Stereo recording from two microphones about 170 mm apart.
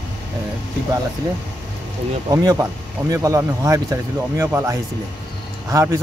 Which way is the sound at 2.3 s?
20° right (ahead or behind).